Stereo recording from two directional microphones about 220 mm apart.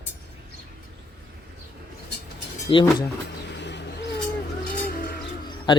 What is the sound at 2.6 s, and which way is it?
Speech, 20° left (ahead or behind).